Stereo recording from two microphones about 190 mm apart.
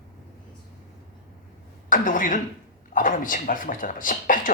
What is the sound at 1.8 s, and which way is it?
Speech, 45° left (ahead or behind).